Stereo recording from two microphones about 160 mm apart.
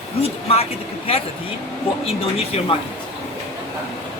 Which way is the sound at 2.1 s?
40° left (ahead or behind).